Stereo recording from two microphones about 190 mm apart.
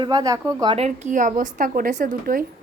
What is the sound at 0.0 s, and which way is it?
Speech, 20° right (ahead or behind).